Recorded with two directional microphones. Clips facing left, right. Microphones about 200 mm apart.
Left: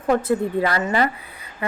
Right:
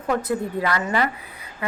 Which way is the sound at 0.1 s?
30° left (ahead or behind).